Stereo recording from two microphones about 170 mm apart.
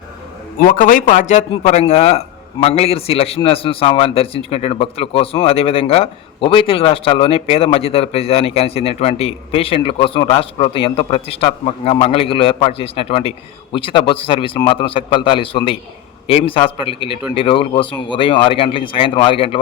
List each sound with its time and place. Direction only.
0.8 s a man's voice: 50° left (ahead or behind); by 19.5 s 30° left (ahead or behind)